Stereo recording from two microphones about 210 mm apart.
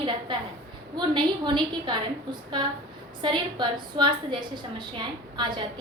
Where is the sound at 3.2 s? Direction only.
20° right (ahead or behind).